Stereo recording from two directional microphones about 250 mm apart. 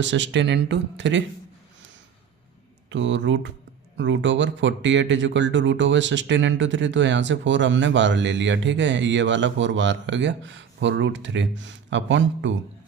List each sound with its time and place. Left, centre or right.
0.0 s speech: right
2.9 s speech: right